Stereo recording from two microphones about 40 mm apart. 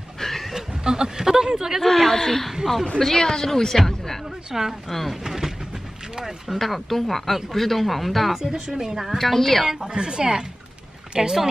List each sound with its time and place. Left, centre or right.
0.2 s a sound: centre
0.6 s a sound: centre
1.8 s speech: centre
4.5 s a woman's voice: centre
4.8 s speech: centre
5.2 s a sound: centre
6.1 s a woman's voice: centre
6.6 s speech: centre
8.6 s a woman's voice: centre
9.7 s a woman's voice: centre